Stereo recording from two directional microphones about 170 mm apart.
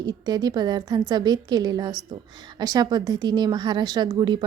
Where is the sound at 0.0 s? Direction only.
25° right (ahead or behind).